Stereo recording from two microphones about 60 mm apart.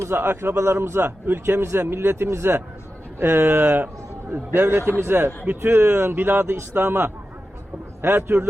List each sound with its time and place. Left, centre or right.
0.0 s speech: right